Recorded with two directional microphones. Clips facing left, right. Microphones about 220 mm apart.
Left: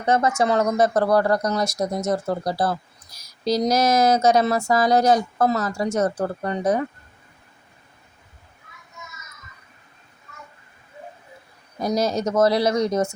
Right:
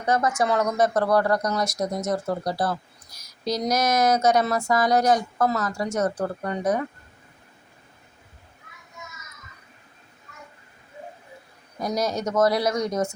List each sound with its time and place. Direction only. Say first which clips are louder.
0.0 s speech: left 3 dB; 25° left (ahead or behind)
11.9 s speech: left 3 dB; 25° left (ahead or behind)